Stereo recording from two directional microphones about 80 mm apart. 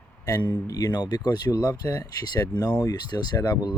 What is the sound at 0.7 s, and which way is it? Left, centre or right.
Speech, left.